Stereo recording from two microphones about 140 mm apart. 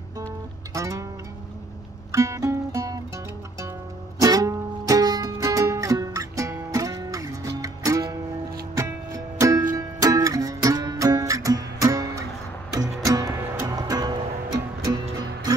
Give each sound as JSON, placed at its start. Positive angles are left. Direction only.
{"t": 0.7, "sound": "music", "side_deg": -20}
{"t": 2.1, "sound": "music", "side_deg": -20}
{"t": 4.2, "sound": "music", "side_deg": -25}